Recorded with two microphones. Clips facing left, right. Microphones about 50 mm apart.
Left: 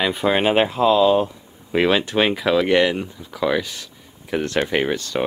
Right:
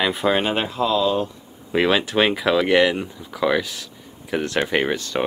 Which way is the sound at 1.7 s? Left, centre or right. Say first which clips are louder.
Left 1 dB; centre.